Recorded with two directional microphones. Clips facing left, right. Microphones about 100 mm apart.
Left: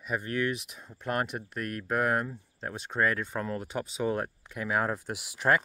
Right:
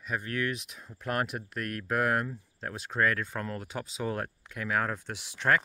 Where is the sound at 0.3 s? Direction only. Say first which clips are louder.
Left 3 dB; 5° left (ahead or behind).